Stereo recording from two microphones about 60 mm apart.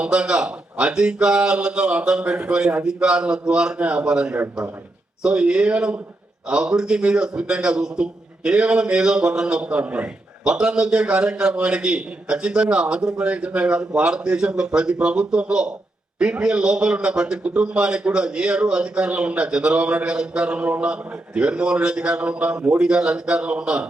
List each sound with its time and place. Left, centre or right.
0.0 s a man's voice: centre